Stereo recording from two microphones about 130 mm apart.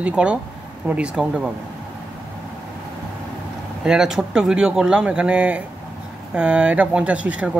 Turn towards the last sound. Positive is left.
turn(degrees=-10)  # may be behind; listen again after turning